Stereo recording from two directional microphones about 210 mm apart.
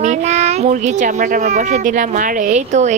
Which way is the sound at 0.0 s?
35° right (ahead or behind).